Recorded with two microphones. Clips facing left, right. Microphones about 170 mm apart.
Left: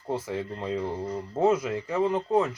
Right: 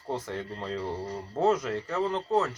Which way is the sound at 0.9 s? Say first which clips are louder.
Left 3 dB; 35° right (ahead or behind).